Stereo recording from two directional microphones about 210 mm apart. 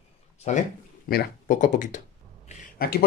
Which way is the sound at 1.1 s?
40° left (ahead or behind).